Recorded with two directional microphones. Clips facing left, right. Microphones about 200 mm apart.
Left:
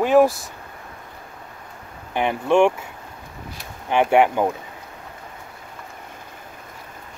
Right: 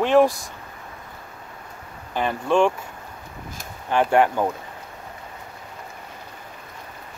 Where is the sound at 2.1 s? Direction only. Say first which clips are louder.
Left 3 dB; 20° left (ahead or behind).